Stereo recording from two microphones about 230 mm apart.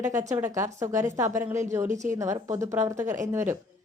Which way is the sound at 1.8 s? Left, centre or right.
Right.